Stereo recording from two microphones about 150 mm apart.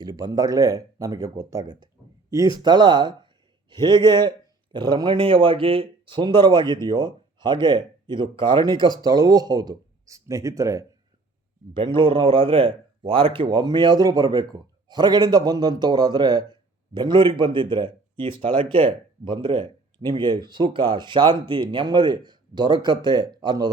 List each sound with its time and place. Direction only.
0.0 s a man's voice: 25° right (ahead or behind)
11.9 s a man's voice: 35° right (ahead or behind)